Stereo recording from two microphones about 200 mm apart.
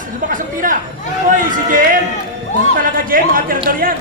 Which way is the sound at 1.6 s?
40° right (ahead or behind).